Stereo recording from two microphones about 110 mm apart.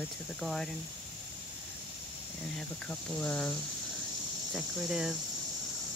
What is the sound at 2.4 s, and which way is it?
Speech, 5° left (ahead or behind).